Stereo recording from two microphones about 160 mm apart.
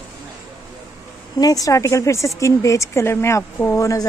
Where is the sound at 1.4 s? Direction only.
20° left (ahead or behind).